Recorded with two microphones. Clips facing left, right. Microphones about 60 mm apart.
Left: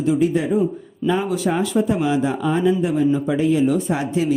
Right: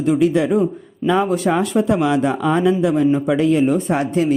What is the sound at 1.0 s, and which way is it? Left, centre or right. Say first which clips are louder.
Speech: right 3 dB; right.